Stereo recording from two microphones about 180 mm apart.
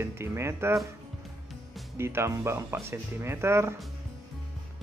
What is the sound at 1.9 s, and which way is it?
Speech, 15° right (ahead or behind).